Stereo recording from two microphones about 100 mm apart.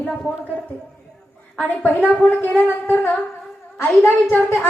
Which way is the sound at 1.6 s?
20° left (ahead or behind).